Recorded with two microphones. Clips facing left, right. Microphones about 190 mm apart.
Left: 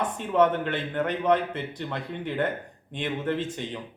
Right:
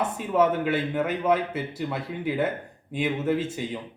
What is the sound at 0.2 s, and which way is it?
A man's voice, 5° right (ahead or behind).